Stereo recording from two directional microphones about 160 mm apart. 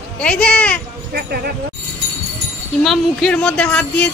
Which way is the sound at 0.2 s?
5° left (ahead or behind).